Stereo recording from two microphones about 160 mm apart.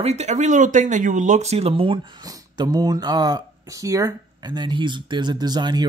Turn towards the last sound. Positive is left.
turn(degrees=-25)  # may be behind; listen again after turning